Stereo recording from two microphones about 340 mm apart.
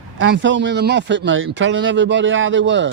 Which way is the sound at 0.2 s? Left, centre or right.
Right.